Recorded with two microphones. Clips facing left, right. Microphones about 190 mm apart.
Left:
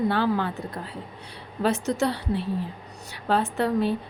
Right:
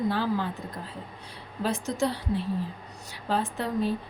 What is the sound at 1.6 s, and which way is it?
Speech, 70° left (ahead or behind).